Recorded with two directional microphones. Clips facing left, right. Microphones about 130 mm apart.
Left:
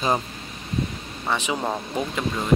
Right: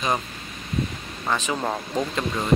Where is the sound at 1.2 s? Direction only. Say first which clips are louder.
Even; 15° left (ahead or behind).